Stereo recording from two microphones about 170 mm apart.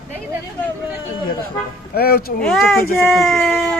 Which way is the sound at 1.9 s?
65° left (ahead or behind).